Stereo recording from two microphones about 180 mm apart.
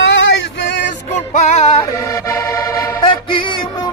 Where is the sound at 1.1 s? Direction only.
40° left (ahead or behind).